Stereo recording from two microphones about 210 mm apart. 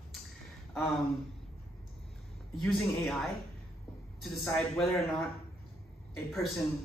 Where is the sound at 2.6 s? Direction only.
Centre (ahead or behind).